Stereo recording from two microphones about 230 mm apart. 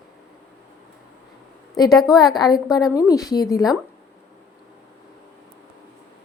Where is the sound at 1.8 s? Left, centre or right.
Centre.